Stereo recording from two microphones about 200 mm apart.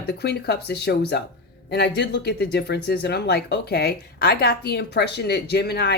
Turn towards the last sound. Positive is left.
turn(degrees=55)  # may be behind; listen again after turning